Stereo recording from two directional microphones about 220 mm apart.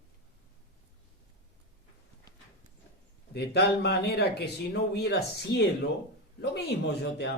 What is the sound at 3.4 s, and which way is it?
Speech, 50° left (ahead or behind).